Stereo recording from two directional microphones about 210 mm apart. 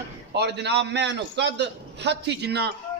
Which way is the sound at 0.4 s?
55° right (ahead or behind).